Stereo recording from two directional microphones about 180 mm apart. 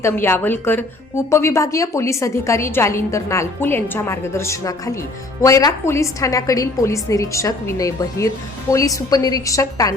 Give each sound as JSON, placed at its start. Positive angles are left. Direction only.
{"t": 0.0, "sound": "a woman's voice", "side_deg": 10}